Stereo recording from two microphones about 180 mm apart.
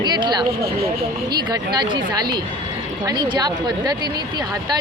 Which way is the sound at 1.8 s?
25° right (ahead or behind).